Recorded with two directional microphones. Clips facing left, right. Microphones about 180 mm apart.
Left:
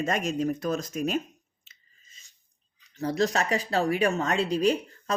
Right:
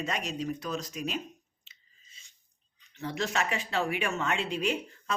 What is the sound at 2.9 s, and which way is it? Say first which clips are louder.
Speech: left 6 dB; 35° left (ahead or behind).